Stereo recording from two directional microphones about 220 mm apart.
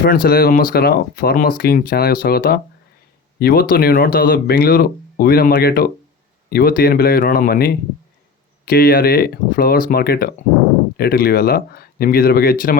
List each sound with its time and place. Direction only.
0.0 s speech: 40° left (ahead or behind)